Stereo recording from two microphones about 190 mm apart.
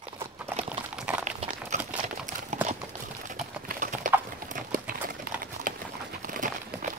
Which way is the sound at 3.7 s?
45° right (ahead or behind).